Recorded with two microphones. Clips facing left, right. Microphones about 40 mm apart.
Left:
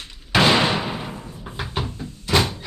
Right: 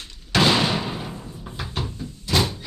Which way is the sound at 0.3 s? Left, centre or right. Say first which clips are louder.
Left 2 dB; centre.